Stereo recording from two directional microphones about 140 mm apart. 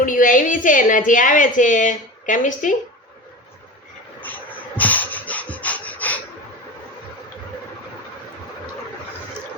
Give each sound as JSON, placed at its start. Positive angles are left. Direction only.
{"t": 0.0, "sound": "a woman's voice", "side_deg": 70}
{"t": 4.8, "sound": "snort", "side_deg": 10}